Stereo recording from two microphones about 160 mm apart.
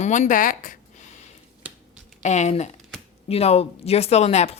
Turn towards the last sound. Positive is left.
turn(degrees=45)  # may be behind; listen again after turning